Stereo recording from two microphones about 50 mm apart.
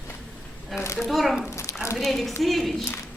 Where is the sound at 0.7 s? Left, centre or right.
Left.